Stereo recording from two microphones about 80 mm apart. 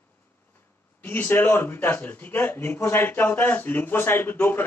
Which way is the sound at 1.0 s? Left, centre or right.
Left.